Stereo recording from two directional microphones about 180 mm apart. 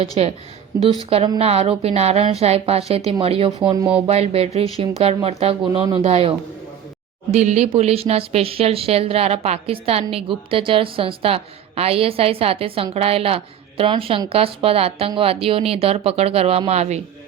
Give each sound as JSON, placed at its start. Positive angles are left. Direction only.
{"t": 0.2, "sound": "speech", "side_deg": -35}
{"t": 1.4, "sound": "speech", "side_deg": -35}